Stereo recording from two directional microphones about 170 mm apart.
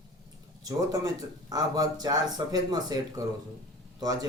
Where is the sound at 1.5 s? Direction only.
20° right (ahead or behind).